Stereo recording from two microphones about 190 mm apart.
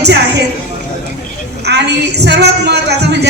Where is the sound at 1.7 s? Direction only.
60° right (ahead or behind).